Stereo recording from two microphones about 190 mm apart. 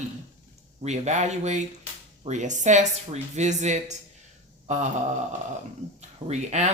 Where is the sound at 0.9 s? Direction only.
35° right (ahead or behind).